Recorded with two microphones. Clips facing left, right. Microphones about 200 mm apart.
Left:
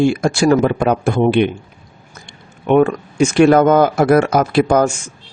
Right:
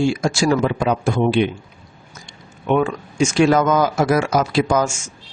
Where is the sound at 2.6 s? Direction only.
60° left (ahead or behind).